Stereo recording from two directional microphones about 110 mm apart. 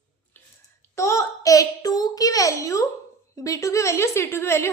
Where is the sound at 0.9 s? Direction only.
25° left (ahead or behind).